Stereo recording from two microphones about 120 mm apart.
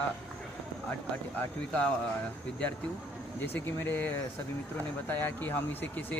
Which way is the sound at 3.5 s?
15° left (ahead or behind).